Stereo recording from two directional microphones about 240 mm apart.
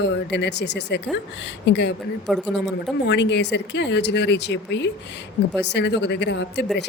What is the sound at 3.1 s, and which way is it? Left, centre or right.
A woman's voice, left.